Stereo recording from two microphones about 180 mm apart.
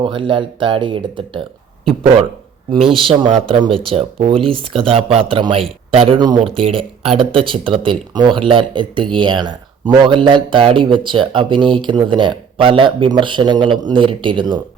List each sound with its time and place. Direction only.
0.0 s speech: 30° right (ahead or behind)
3.0 s speech: 30° right (ahead or behind)